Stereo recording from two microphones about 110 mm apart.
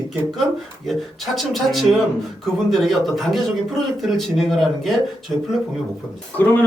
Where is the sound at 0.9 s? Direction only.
Centre (ahead or behind).